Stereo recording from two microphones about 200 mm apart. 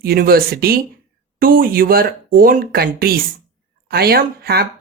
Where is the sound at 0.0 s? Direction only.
50° right (ahead or behind).